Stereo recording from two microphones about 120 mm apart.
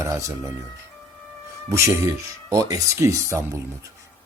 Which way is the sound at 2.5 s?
30° right (ahead or behind).